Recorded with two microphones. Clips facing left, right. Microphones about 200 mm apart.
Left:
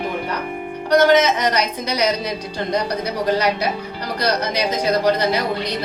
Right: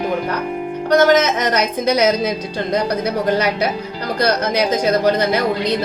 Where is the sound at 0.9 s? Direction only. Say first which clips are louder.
Right 1 dB; 50° right (ahead or behind).